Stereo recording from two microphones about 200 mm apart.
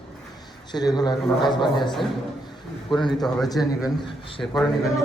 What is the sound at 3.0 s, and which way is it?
A man's voice, centre (ahead or behind).